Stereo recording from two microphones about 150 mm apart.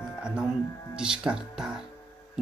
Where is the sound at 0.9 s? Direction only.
5° right (ahead or behind).